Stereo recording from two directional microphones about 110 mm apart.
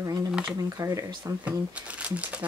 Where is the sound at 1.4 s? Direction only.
10° right (ahead or behind).